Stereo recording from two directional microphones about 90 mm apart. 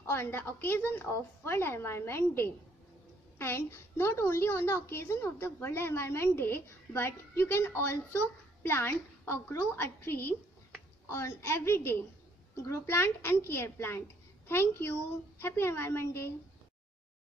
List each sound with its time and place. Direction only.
0.0 s a woman's voice: 30° left (ahead or behind)